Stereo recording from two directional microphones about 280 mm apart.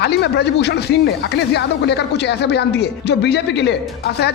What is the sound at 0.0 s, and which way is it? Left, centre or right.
Speech, left.